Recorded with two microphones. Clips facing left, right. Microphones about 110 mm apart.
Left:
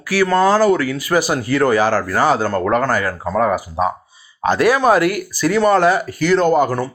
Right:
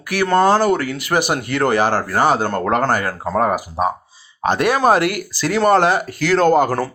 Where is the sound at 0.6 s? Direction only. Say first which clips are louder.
Left 3 dB; 65° right (ahead or behind).